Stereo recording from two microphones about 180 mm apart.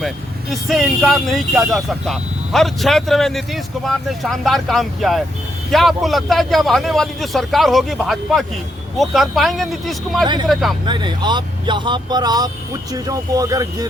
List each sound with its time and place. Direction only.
0.5 s speech: centre (ahead or behind)
10.8 s speech: 25° right (ahead or behind)